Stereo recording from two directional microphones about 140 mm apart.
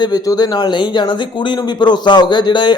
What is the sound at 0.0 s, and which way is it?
A man's voice, 30° left (ahead or behind).